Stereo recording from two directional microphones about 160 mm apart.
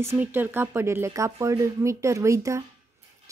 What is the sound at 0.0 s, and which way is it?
A woman's voice, 15° right (ahead or behind).